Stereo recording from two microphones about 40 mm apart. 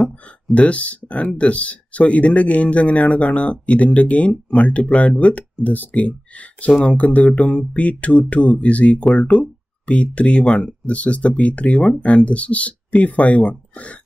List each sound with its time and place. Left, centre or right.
0.6 s speech: left